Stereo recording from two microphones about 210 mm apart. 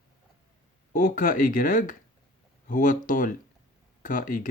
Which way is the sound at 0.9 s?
40° left (ahead or behind).